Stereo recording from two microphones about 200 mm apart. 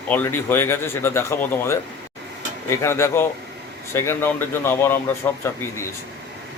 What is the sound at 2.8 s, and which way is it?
Speech, 15° left (ahead or behind).